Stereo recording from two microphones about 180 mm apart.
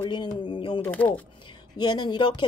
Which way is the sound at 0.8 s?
10° left (ahead or behind).